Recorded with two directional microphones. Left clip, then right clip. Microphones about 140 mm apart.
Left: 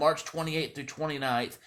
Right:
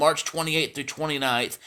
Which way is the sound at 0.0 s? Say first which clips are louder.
Right 5 dB; 25° right (ahead or behind).